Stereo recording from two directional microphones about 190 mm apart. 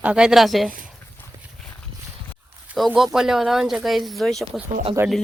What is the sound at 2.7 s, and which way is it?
Speech, 5° right (ahead or behind).